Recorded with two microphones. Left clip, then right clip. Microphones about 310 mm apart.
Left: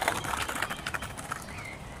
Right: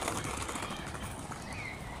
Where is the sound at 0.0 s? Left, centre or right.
Left.